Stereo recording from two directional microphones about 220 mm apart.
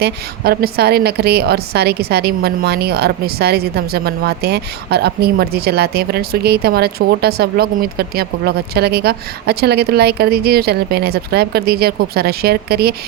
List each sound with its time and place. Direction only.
0.0 s a woman's voice: 45° right (ahead or behind)